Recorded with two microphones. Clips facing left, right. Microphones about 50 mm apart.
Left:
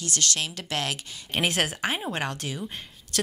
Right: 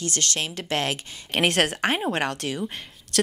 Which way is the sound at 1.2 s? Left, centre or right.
Right.